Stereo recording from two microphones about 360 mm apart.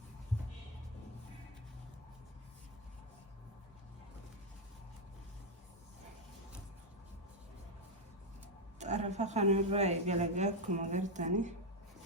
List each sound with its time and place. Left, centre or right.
8.8 s a woman's voice: centre